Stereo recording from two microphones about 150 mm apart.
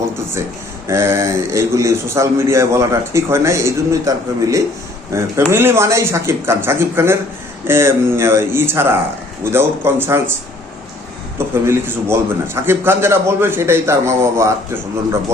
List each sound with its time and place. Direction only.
0.9 s a man's voice: 15° right (ahead or behind)
11.3 s a man's voice: 15° right (ahead or behind)